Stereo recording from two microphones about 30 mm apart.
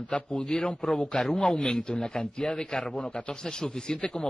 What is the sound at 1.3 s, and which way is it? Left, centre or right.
A man's voice, left.